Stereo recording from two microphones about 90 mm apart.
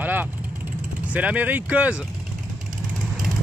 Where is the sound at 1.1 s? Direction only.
15° right (ahead or behind).